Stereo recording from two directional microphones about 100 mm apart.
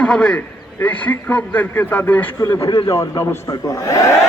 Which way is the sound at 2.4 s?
30° left (ahead or behind).